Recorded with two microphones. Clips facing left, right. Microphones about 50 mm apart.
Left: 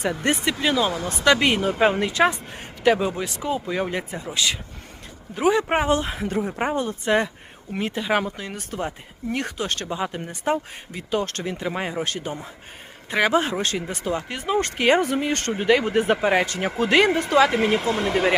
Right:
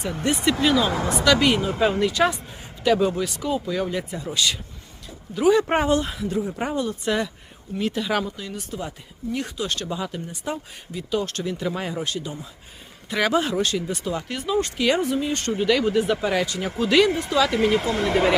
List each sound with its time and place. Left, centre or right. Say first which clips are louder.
0.0 s speech: left 2 dB; left
0.6 s speech: right 2 dB; centre
1.2 s speech: left 1 dB; left
5.3 s speech: right 2 dB; left
5.6 s speech: even; centre
5.9 s speech: even; left
6.1 s speech: left 1 dB; left
6.5 s speech: left 1 dB; left
8.2 s speech: left 1 dB; left
12.0 s speech: left 1 dB; left
15.0 s speech: left 1 dB; left
17.8 s speech: right 1 dB; centre